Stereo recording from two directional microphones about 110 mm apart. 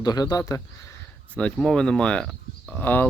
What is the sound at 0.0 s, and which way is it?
Speech, 35° left (ahead or behind).